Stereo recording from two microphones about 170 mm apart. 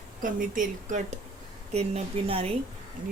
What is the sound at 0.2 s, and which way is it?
A woman's voice, 50° right (ahead or behind).